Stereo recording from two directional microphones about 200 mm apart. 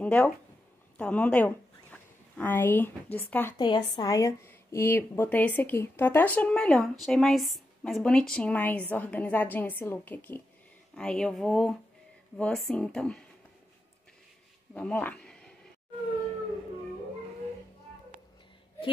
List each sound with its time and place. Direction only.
0.0 s speech: 5° left (ahead or behind)
3.5 s speech: 20° left (ahead or behind); by 13.2 s 5° left (ahead or behind)
14.7 s a sound: 5° left (ahead or behind)